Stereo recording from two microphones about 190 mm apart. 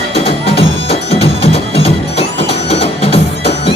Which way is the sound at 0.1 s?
30° left (ahead or behind).